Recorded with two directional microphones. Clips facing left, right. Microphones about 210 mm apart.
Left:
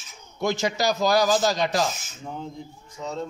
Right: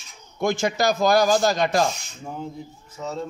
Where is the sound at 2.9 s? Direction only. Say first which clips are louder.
Right 1 dB; 5° right (ahead or behind).